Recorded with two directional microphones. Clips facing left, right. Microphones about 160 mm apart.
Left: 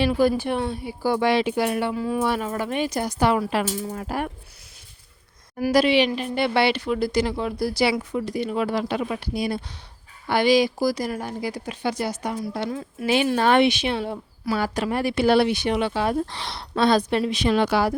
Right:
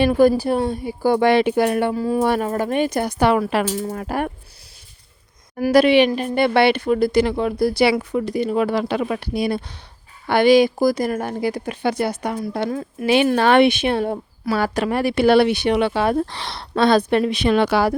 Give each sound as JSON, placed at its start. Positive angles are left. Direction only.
{"t": 0.0, "sound": "speech", "side_deg": -50}
{"t": 3.7, "sound": "speech", "side_deg": -45}
{"t": 3.9, "sound": "speech", "side_deg": -60}
{"t": 5.5, "sound": "speech", "side_deg": -55}
{"t": 13.2, "sound": "speech", "side_deg": -70}
{"t": 14.5, "sound": "speech", "side_deg": -65}
{"t": 17.1, "sound": "speech", "side_deg": -60}